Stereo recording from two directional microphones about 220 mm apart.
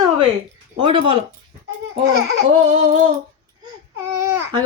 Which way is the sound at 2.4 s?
30° right (ahead or behind).